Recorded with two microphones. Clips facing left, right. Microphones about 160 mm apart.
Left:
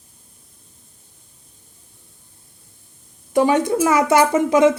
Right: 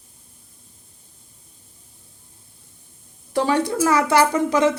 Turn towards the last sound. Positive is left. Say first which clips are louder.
# left 4 dB
turn(degrees=20)  # may be behind; listen again after turning